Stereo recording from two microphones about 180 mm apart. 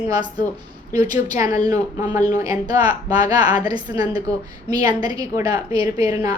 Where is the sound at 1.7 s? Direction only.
20° right (ahead or behind).